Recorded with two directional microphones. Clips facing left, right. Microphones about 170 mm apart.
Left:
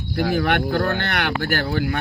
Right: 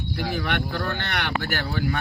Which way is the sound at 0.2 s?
50° left (ahead or behind).